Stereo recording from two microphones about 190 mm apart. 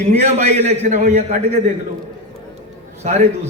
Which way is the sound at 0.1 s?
35° right (ahead or behind).